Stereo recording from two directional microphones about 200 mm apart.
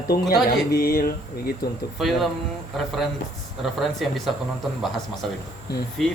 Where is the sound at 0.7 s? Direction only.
50° left (ahead or behind).